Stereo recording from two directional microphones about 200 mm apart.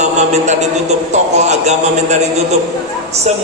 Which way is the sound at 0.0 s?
35° right (ahead or behind).